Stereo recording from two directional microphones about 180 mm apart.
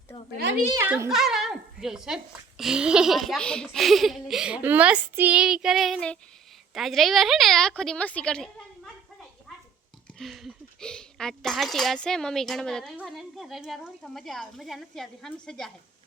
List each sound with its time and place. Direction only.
0.3 s a child's voice: 65° right (ahead or behind)
0.7 s a woman's voice: 15° right (ahead or behind)
1.1 s speech: centre (ahead or behind)
10.2 s speech: centre (ahead or behind)